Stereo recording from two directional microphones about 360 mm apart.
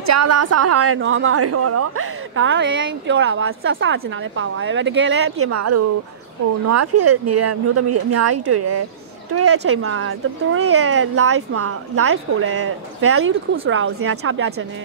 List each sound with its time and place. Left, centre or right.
0.0 s a woman's voice: right